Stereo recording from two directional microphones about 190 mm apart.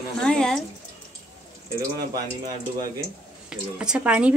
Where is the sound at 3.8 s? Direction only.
5° right (ahead or behind).